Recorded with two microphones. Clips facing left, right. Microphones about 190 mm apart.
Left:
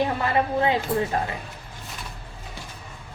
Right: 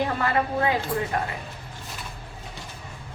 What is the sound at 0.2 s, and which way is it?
Speech, 25° left (ahead or behind).